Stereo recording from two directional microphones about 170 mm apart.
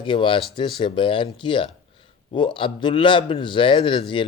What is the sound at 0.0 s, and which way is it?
A man's voice, 30° left (ahead or behind).